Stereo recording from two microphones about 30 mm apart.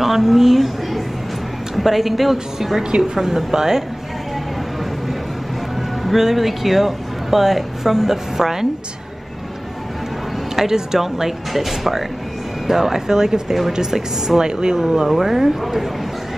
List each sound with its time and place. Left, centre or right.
0.0 s a sound: centre
1.8 s speech: centre
6.0 s speech: centre
10.5 s speech: centre
14.4 s speech: right
15.0 s speech: centre